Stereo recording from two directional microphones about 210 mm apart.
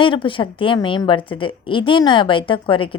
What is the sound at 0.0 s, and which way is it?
A woman's voice, 25° left (ahead or behind).